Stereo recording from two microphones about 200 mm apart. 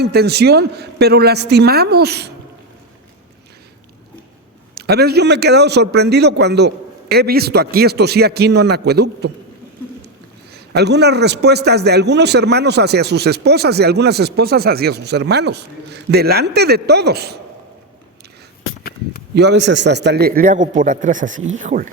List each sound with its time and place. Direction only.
0.0 s a woman's voice: 55° right (ahead or behind)
4.7 s a man's voice: 55° right (ahead or behind)
10.5 s a man's voice: 55° right (ahead or behind)
19.3 s a woman's voice: 60° right (ahead or behind); by 21.8 s 40° right (ahead or behind)